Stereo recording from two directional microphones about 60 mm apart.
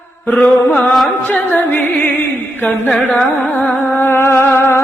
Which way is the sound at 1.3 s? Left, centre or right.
Left.